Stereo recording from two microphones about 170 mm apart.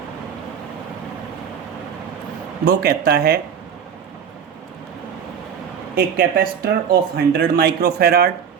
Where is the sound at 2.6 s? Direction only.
65° right (ahead or behind).